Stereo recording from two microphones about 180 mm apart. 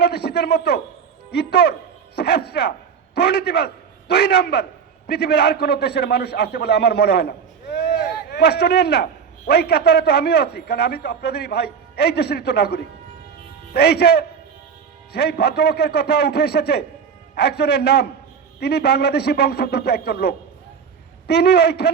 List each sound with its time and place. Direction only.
0.0 s a man's voice: 65° left (ahead or behind)